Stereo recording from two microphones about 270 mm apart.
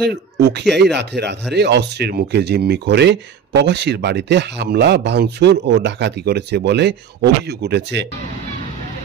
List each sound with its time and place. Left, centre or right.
0.0 s speech: right